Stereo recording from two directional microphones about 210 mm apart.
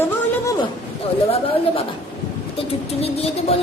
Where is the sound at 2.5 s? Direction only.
30° left (ahead or behind).